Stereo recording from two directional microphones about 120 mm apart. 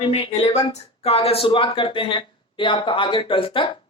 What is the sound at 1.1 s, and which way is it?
Speech, 55° left (ahead or behind).